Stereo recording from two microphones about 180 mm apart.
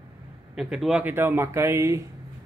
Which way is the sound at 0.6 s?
5° right (ahead or behind).